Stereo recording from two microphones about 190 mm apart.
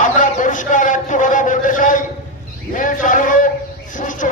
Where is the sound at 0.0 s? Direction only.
40° left (ahead or behind).